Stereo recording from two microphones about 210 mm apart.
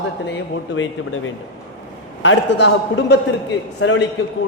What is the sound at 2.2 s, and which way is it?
A man's voice, 55° left (ahead or behind).